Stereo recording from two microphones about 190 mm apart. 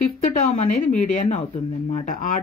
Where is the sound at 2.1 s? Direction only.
45° left (ahead or behind).